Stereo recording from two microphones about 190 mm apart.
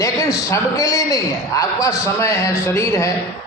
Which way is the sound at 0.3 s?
15° left (ahead or behind).